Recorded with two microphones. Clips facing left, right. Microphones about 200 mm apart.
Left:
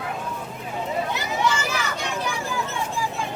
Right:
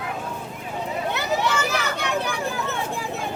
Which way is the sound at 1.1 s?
65° right (ahead or behind).